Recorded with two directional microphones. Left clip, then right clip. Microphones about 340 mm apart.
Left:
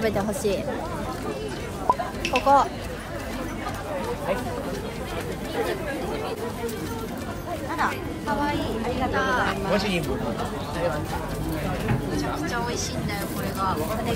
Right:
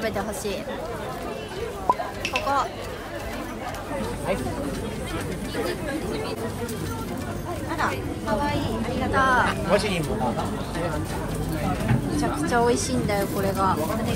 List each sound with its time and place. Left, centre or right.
0.0 s speech: centre
1.9 s a sound: centre
2.2 s speech: centre
9.1 s speech: centre
9.5 s a woman's voice: centre
12.2 s speech: centre